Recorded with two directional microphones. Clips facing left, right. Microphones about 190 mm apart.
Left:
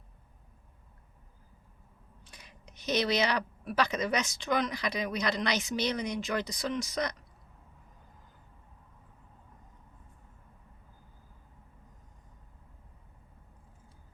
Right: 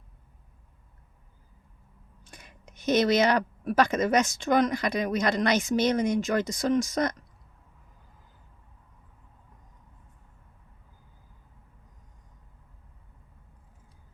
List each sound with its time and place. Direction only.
2.2 s speech: 50° right (ahead or behind)